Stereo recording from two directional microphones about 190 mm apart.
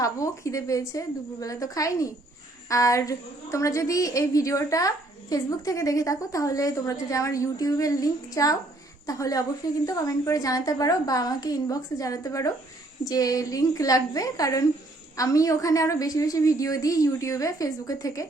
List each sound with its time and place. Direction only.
0.0 s a woman's voice: 15° left (ahead or behind)